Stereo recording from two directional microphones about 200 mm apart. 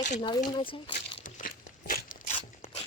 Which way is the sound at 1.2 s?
45° left (ahead or behind).